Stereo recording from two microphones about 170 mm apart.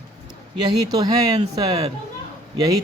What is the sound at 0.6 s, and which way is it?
Speech, 25° right (ahead or behind).